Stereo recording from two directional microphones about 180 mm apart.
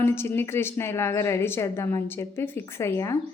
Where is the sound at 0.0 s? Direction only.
10° left (ahead or behind).